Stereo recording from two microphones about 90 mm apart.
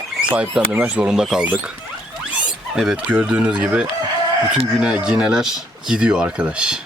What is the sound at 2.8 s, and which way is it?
Speech, 10° right (ahead or behind).